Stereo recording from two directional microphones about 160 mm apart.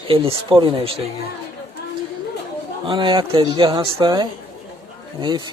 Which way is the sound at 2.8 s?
30° right (ahead or behind).